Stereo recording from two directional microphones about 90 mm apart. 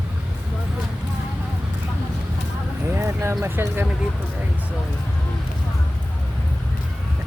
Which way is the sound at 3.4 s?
25° right (ahead or behind).